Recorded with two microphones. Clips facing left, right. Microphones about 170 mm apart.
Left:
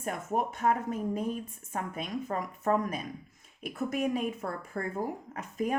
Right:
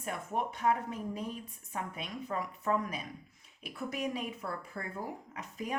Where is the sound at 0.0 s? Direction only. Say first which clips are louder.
Left 4 dB; 45° left (ahead or behind).